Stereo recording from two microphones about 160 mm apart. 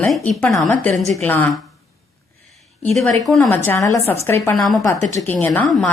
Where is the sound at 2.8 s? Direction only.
Centre (ahead or behind).